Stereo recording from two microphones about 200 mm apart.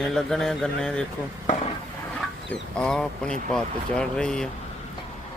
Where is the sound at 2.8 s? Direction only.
5° left (ahead or behind).